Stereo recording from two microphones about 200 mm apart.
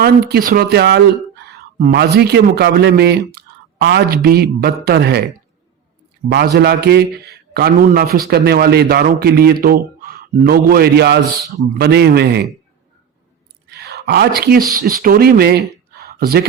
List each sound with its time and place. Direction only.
0.0 s a man's voice: 50° right (ahead or behind)
6.2 s a man's voice: 50° right (ahead or behind)
13.7 s speech: 55° right (ahead or behind)
15.9 s a sound: 50° right (ahead or behind)